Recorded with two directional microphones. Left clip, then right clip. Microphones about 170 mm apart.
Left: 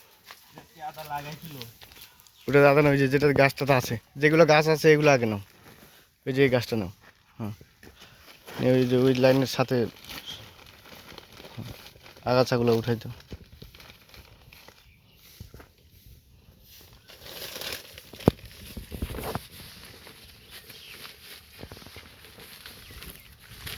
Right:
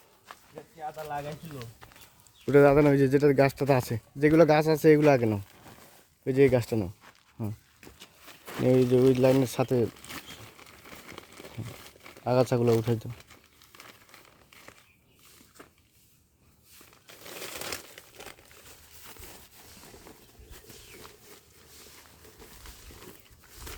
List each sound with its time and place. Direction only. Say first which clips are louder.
1.0 s speech: even; 25° right (ahead or behind)
2.5 s speech: left 1 dB; centre (ahead or behind)
8.6 s speech: even; centre (ahead or behind)
10.6 s a sound: even; 25° right (ahead or behind)
12.2 s speech: left 2 dB; centre (ahead or behind)
17.2 s crumpling: left 2 dB; 40° right (ahead or behind)